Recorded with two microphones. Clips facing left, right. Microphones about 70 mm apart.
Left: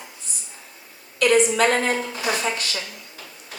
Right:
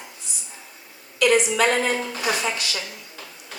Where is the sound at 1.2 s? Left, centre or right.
Left.